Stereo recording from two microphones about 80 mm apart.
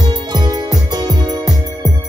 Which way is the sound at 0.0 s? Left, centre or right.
Right.